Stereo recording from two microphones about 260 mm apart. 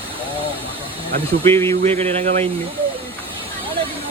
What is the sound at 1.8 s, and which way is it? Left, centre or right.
Speech, right.